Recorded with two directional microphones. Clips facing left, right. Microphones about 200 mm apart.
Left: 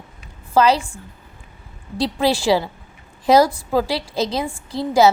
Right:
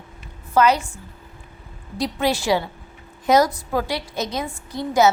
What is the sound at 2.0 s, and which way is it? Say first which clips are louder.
A woman's voice: left 3 dB; 30° left (ahead or behind).